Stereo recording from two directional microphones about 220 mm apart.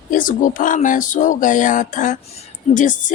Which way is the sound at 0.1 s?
35° left (ahead or behind).